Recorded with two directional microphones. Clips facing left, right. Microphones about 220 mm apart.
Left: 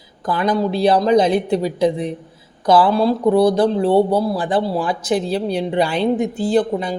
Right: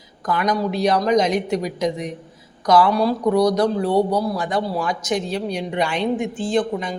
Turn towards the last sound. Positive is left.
turn(degrees=35)  # may be behind; listen again after turning